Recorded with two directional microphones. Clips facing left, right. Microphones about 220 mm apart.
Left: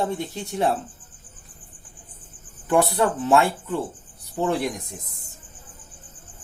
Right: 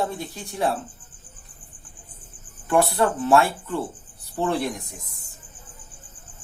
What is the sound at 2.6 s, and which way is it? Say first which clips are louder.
Speech: even; 15° left (ahead or behind).